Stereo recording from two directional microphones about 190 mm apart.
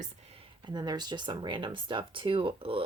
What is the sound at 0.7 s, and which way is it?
A woman's voice, 20° right (ahead or behind).